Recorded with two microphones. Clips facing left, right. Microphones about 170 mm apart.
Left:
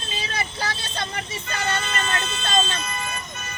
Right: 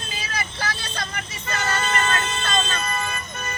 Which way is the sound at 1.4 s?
55° right (ahead or behind).